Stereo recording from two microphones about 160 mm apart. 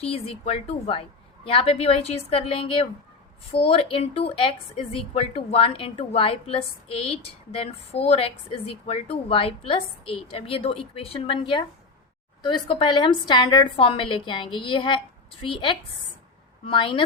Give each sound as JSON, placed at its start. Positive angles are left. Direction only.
{"t": 0.0, "sound": "speech", "side_deg": 40}